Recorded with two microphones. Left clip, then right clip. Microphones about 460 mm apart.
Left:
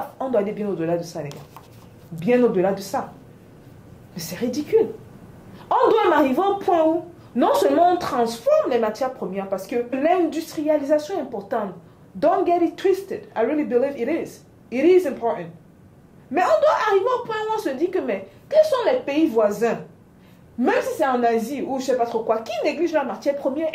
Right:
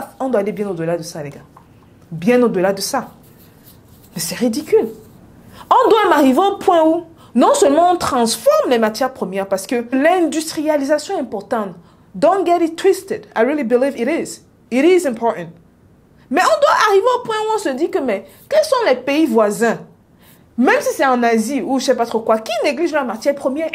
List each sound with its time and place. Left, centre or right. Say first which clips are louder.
0.3 s a woman's voice: right 4 dB; right
4.1 s a woman's voice: right 7 dB; right
8.0 s a woman's voice: right 6 dB; right